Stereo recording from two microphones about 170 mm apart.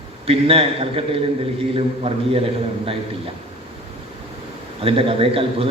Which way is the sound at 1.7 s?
35° right (ahead or behind).